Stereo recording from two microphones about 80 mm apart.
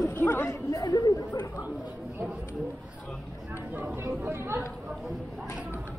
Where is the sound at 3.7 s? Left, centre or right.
Right.